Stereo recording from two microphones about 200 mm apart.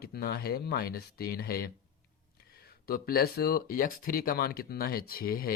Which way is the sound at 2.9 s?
50° left (ahead or behind).